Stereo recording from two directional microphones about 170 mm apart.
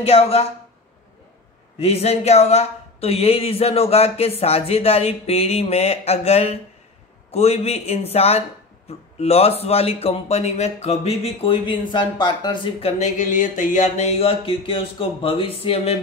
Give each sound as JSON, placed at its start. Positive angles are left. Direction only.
{"t": 0.0, "sound": "speech", "side_deg": 35}
{"t": 1.8, "sound": "speech", "side_deg": 35}
{"t": 13.0, "sound": "speech", "side_deg": 45}